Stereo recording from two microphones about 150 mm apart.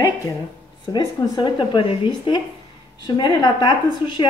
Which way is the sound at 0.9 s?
30° left (ahead or behind).